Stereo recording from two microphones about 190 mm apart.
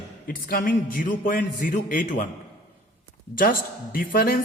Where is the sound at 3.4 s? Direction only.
45° left (ahead or behind).